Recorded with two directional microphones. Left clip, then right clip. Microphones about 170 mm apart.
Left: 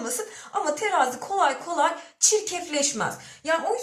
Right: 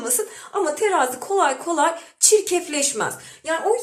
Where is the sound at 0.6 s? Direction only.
35° right (ahead or behind).